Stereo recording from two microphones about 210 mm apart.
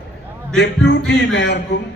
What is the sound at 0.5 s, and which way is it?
A man's voice, 55° left (ahead or behind).